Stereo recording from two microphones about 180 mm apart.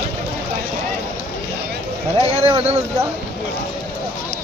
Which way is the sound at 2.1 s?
35° right (ahead or behind).